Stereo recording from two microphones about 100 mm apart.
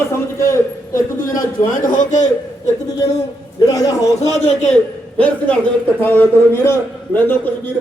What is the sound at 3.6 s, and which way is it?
Speech, 40° left (ahead or behind).